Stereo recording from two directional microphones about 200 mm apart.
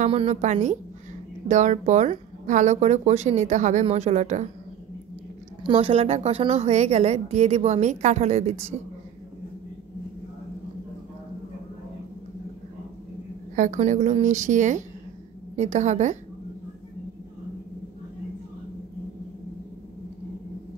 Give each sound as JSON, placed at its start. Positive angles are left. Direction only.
{"t": 0.0, "sound": "a woman's voice", "side_deg": -30}
{"t": 5.6, "sound": "a woman's voice", "side_deg": -25}
{"t": 13.6, "sound": "a woman's voice", "side_deg": -40}